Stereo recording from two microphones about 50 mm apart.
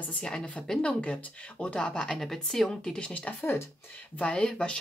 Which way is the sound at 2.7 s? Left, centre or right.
Centre.